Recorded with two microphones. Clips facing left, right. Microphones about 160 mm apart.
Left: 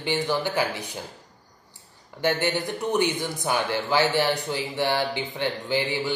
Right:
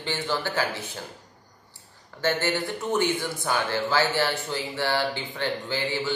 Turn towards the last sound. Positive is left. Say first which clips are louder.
# left 2 dB
turn(degrees=15)  # may be behind; listen again after turning